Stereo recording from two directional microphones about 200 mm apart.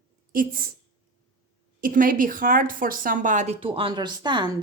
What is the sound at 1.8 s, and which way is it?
A woman's voice, 45° right (ahead or behind).